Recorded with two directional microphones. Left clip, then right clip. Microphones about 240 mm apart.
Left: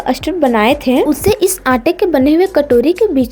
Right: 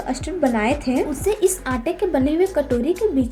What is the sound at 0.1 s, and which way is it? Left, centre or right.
A woman's voice, left.